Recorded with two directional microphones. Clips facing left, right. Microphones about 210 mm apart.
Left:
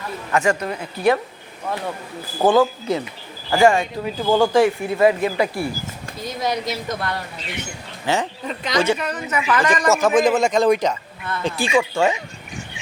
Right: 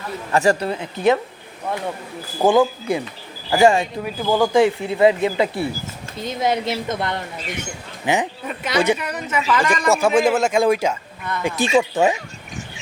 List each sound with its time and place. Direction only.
0.3 s speech: 35° right (ahead or behind)
2.5 s speech: 15° right (ahead or behind)
4.2 s speech: 5° right (ahead or behind)
4.5 s speech: 20° right (ahead or behind)